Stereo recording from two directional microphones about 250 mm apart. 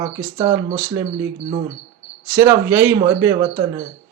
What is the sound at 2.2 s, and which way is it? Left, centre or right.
Speech, centre.